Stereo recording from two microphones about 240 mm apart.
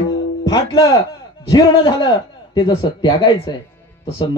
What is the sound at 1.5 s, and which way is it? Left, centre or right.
Speech, centre.